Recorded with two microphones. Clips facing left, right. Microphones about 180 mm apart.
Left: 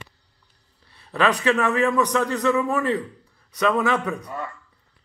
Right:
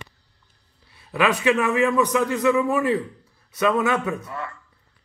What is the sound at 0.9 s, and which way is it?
A man's voice, 10° right (ahead or behind).